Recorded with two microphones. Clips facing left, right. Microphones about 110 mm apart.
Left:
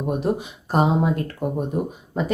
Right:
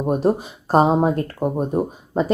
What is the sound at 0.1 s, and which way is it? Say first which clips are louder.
Speech: right 5 dB; 35° right (ahead or behind).